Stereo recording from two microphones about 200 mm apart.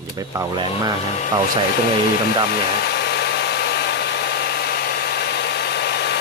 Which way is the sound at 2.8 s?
55° left (ahead or behind).